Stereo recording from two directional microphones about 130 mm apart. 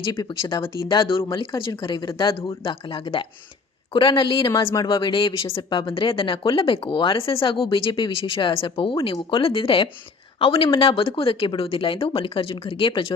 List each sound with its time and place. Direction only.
0.1 s speech: 35° left (ahead or behind)
4.6 s speech: 25° left (ahead or behind)
4.9 s speech: 40° left (ahead or behind)